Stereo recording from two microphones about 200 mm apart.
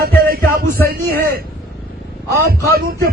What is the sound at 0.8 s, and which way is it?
Speech, 50° right (ahead or behind).